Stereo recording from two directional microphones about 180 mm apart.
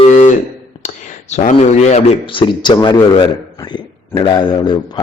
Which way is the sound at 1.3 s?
40° left (ahead or behind).